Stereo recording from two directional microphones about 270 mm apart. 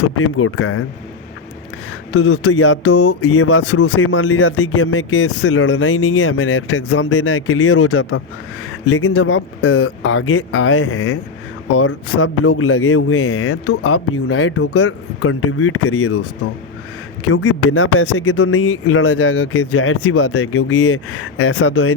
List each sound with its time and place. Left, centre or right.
0.2 s speech: left
2.1 s speech: left
17.2 s speech: left